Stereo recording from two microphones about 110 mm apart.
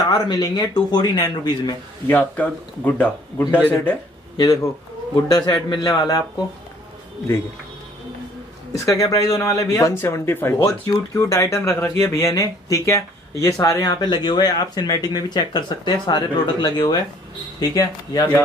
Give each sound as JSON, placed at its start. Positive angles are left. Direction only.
{"t": 0.0, "sound": "speech", "side_deg": 35}
{"t": 2.0, "sound": "speech", "side_deg": 15}
{"t": 5.1, "sound": "speech", "side_deg": 40}
{"t": 8.7, "sound": "speech", "side_deg": 30}